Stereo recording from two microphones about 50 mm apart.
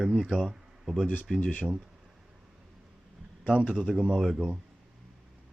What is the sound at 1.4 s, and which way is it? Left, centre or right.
Speech, left.